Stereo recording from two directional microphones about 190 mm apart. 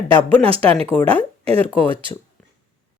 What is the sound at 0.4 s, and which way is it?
Speech, 30° right (ahead or behind).